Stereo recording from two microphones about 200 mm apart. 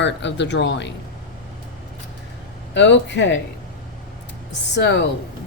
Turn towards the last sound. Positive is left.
turn(degrees=60)  # may be behind; listen again after turning